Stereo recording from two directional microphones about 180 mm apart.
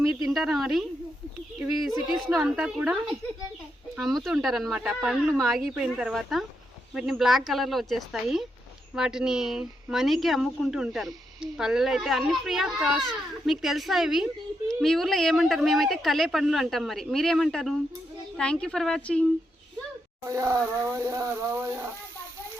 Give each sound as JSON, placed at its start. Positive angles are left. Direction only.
{"t": 0.3, "sound": "a woman's voice", "side_deg": 0}
{"t": 2.3, "sound": "a woman's voice", "side_deg": 0}
{"t": 4.0, "sound": "a woman's voice", "side_deg": 0}
{"t": 20.2, "sound": "speech", "side_deg": -15}